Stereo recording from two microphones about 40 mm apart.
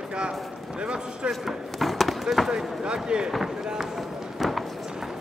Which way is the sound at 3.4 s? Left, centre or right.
Centre.